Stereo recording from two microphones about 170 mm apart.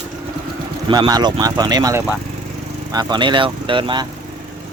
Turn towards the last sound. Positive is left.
turn(degrees=-30)  # may be behind; listen again after turning